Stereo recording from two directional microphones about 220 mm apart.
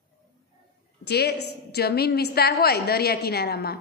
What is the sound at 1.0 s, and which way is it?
A woman's voice, 50° left (ahead or behind).